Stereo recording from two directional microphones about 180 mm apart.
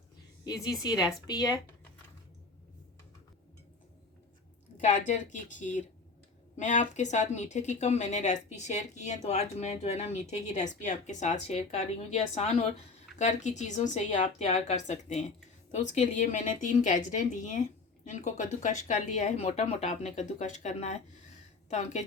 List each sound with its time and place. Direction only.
0.4 s a woman's voice: 20° left (ahead or behind)
4.8 s a woman's voice: 45° left (ahead or behind)